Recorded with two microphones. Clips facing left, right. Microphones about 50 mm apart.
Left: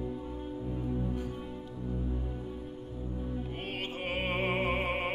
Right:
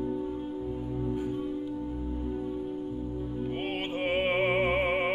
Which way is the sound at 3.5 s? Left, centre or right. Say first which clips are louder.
Right 6 dB; centre.